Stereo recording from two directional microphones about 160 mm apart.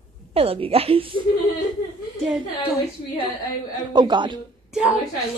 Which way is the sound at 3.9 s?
30° right (ahead or behind).